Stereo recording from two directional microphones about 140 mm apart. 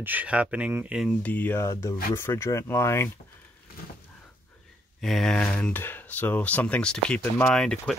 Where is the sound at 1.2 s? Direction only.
10° left (ahead or behind).